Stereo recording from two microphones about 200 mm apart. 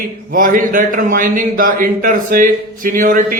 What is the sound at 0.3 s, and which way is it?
A man's voice, 45° right (ahead or behind).